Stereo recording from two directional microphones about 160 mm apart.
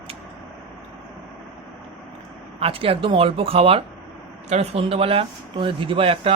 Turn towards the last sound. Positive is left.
turn(degrees=-35)  # may be behind; listen again after turning